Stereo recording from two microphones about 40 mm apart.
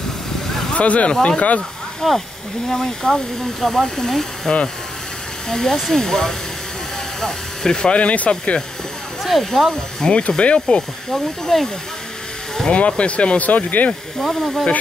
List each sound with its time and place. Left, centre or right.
0.7 s speech: left
2.0 s speech: centre; by 8.5 s left
9.4 s speech: centre
10.1 s speech: left
11.1 s speech: centre
12.7 s speech: left
14.2 s speech: centre